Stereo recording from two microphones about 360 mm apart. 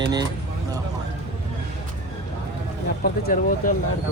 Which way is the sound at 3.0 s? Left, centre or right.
Left.